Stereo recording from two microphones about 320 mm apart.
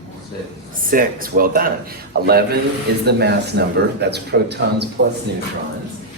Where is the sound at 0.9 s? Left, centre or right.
Right.